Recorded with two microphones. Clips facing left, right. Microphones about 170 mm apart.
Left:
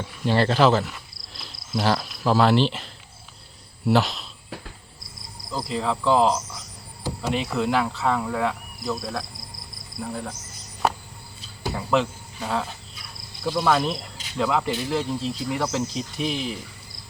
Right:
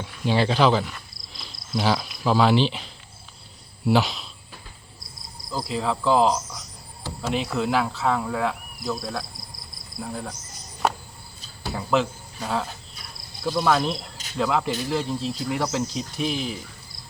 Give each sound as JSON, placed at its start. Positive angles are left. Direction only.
{"t": 0.0, "sound": "speech", "side_deg": 0}
{"t": 4.4, "sound": "cricket", "side_deg": 80}
{"t": 5.5, "sound": "speech", "side_deg": 0}
{"t": 11.7, "sound": "speech", "side_deg": 0}